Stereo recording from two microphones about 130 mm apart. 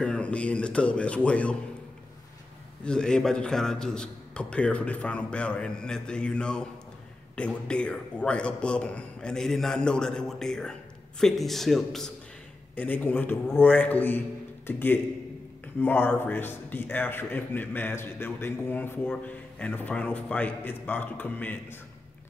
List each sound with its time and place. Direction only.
0.0 s a man's voice: 10° left (ahead or behind)
2.8 s a man's voice: 5° left (ahead or behind)
12.7 s a man's voice: 15° left (ahead or behind)